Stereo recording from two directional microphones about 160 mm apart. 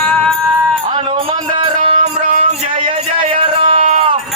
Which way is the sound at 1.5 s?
35° right (ahead or behind).